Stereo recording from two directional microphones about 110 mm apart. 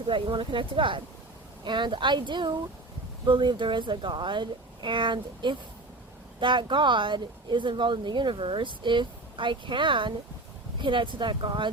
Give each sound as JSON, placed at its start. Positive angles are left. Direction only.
{"t": 0.1, "sound": "speech", "side_deg": -50}